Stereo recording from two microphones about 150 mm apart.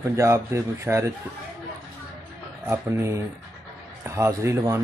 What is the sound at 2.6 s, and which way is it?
A man's voice, 15° right (ahead or behind).